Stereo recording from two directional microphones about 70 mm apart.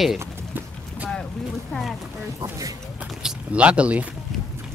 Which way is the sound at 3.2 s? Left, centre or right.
Centre.